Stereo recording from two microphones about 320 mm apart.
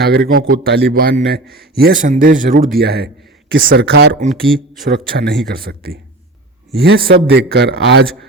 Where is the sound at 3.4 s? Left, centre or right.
Right.